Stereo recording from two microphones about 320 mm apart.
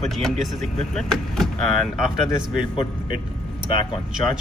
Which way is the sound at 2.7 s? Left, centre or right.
Centre.